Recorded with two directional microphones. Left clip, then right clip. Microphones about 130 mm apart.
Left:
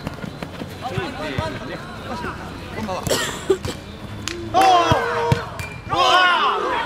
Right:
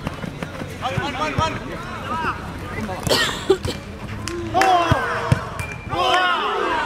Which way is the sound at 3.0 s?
10° right (ahead or behind).